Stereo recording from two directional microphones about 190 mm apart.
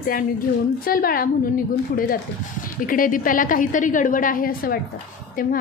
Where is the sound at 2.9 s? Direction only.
45° left (ahead or behind).